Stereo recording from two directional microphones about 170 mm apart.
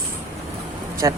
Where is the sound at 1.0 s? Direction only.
20° right (ahead or behind).